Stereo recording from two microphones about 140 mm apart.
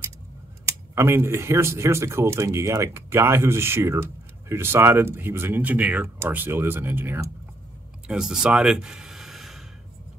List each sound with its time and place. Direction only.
0.7 s speech: 20° right (ahead or behind)
8.1 s speech: 5° right (ahead or behind)